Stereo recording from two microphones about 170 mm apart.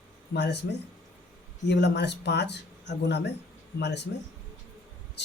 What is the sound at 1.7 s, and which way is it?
Speech, 85° left.